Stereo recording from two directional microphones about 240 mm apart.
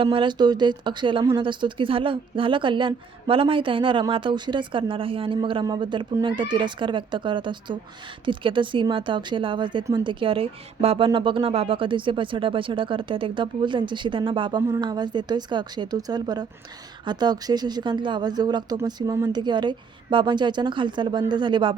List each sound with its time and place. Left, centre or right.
0.0 s speech: right